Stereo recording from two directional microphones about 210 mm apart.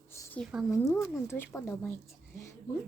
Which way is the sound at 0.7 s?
15° left (ahead or behind).